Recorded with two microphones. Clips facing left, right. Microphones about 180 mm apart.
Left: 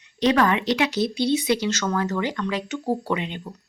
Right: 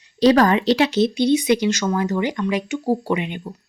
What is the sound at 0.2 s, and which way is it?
Speech, 35° right (ahead or behind).